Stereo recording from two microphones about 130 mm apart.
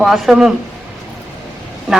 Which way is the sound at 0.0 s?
5° right (ahead or behind).